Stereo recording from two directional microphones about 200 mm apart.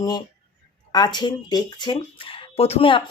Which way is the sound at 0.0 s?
20° left (ahead or behind).